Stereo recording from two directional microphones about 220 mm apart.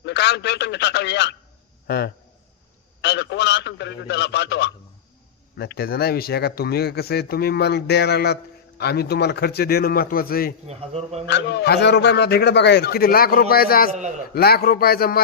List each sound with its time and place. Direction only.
0.0 s a man's voice: 50° left (ahead or behind)
3.0 s a man's voice: 50° left (ahead or behind)
10.7 s speech: 30° right (ahead or behind)
11.3 s speech: 50° left (ahead or behind)